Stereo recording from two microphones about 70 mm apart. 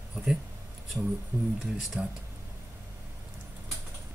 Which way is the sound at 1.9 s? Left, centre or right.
Centre.